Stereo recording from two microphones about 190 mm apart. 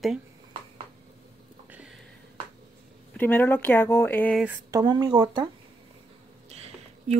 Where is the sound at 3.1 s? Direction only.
10° left (ahead or behind).